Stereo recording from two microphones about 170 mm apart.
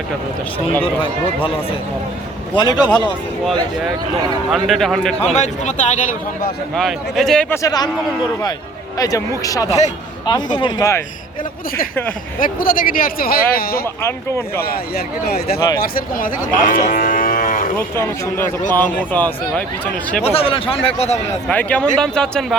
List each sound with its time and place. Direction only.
2.6 s speech: 25° left (ahead or behind)
4.5 s a man's voice: centre (ahead or behind)
5.2 s a man's voice: 40° left (ahead or behind)
6.7 s a man's voice: centre (ahead or behind)
7.5 s speech: 20° left (ahead or behind)
9.0 s speech: 20° left (ahead or behind)
12.4 s speech: 55° left (ahead or behind)
14.0 s a man's voice: 15° left (ahead or behind)
14.6 s speech: 65° left (ahead or behind)
15.8 s cattle: 55° left (ahead or behind)
17.7 s a man's voice: 15° left (ahead or behind)
20.2 s speech: 35° left (ahead or behind)
21.4 s a man's voice: 10° left (ahead or behind)